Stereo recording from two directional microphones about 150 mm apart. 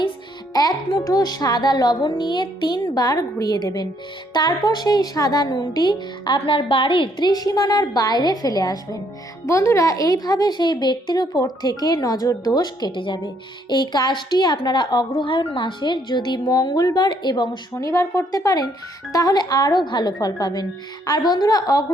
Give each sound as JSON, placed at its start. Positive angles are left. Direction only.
{"t": 0.5, "sound": "a woman's voice", "side_deg": 25}